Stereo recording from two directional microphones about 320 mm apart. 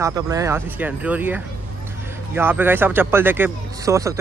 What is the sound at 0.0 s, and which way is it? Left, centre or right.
Speech, centre.